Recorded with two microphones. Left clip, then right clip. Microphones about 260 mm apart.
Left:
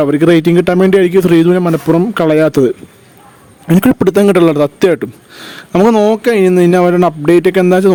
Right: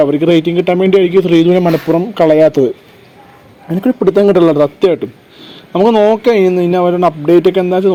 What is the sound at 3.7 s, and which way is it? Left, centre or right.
Speech, left.